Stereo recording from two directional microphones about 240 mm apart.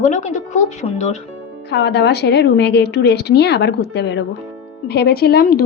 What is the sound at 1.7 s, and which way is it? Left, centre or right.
A woman's voice, left.